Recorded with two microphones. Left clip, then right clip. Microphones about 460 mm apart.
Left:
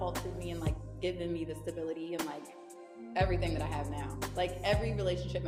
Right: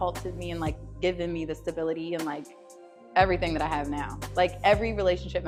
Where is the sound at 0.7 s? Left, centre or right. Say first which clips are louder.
Right 10 dB; left.